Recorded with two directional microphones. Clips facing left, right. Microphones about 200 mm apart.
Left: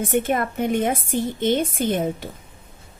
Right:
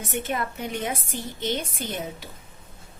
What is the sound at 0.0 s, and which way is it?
A woman's voice, 50° left (ahead or behind).